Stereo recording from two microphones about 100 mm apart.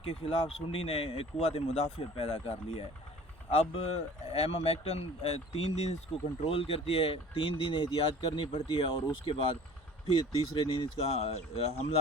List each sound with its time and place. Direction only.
0.0 s speech: 85° left
3.5 s speech: 90° left
6.4 s speech: 70° left (ahead or behind); by 11.9 s 90° left